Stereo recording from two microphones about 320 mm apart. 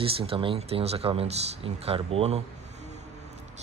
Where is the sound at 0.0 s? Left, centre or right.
Centre.